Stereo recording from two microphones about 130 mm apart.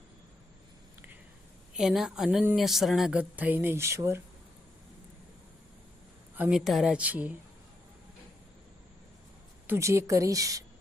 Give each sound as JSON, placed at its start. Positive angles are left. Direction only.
{"t": 1.7, "sound": "a woman's voice", "side_deg": -5}
{"t": 6.3, "sound": "speech", "side_deg": -15}
{"t": 6.7, "sound": "speech", "side_deg": -5}
{"t": 9.6, "sound": "a woman's voice", "side_deg": -20}